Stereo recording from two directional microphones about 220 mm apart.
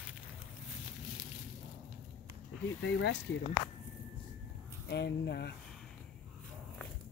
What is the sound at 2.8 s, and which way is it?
Speech, 55° left (ahead or behind).